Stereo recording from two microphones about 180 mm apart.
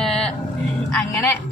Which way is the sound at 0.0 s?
5° left (ahead or behind).